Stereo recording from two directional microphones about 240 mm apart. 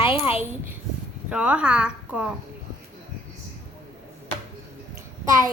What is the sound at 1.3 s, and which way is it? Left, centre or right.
A woman's voice, centre.